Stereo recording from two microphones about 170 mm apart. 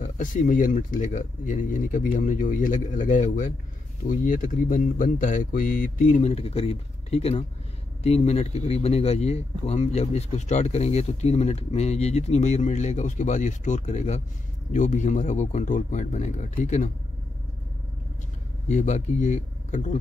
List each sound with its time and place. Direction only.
0.0 s speech: 50° left (ahead or behind)
18.7 s speech: 45° left (ahead or behind)